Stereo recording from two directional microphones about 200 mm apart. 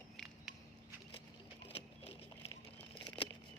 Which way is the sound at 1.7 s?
30° left (ahead or behind).